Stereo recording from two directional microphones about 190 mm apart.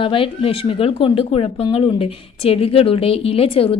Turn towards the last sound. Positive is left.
turn(degrees=30)  # may be behind; listen again after turning